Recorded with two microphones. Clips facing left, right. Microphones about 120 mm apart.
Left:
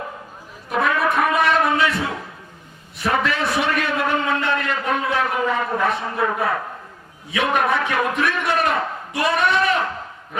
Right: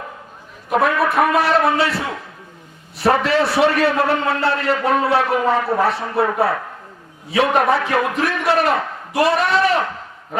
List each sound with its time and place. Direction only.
0.9 s speech: 30° right (ahead or behind)
3.0 s a man's voice: 35° right (ahead or behind)